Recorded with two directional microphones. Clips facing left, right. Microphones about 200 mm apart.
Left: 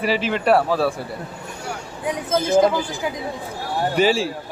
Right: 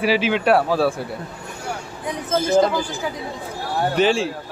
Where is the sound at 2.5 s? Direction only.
15° left (ahead or behind).